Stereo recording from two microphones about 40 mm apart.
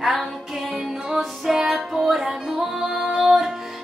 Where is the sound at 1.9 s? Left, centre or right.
Centre.